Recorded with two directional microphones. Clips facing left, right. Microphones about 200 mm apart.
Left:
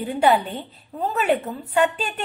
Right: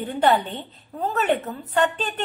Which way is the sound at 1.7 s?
10° left (ahead or behind).